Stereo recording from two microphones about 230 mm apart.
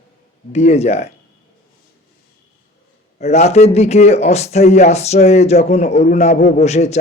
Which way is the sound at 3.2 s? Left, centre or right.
Left.